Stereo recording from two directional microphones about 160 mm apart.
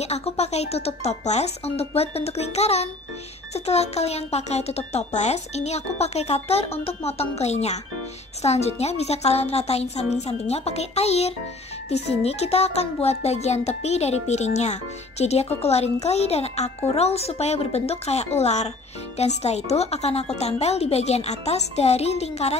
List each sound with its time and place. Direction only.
0.0 s a woman's voice: 40° left (ahead or behind)